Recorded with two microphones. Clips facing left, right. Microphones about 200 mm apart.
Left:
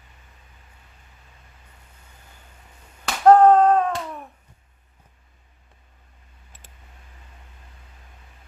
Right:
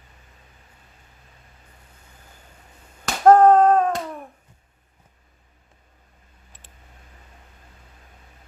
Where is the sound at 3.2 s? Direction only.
45° right (ahead or behind).